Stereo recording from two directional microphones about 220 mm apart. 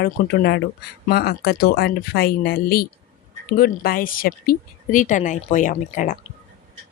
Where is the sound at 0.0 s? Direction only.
45° left (ahead or behind).